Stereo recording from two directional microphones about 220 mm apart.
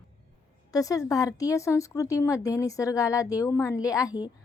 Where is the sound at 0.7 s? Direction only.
15° left (ahead or behind).